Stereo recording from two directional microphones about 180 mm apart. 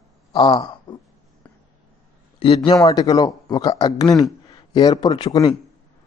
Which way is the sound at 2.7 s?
20° left (ahead or behind).